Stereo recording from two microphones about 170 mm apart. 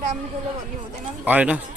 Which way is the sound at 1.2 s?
10° right (ahead or behind).